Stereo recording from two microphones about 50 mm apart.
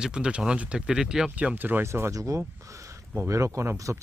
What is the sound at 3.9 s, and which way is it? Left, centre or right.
Speech, right.